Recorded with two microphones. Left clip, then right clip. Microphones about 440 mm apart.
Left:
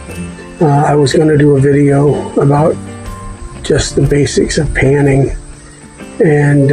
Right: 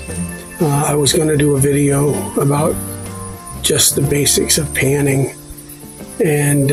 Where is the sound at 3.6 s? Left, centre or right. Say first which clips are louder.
Left 3 dB; right.